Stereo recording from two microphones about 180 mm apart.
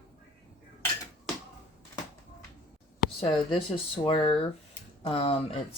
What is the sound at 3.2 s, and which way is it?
Speech, 30° left (ahead or behind).